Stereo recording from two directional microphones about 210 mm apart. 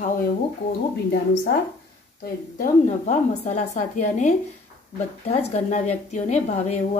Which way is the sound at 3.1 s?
35° left (ahead or behind).